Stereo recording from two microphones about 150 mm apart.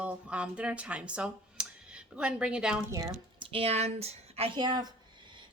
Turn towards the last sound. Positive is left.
turn(degrees=-25)  # may be behind; listen again after turning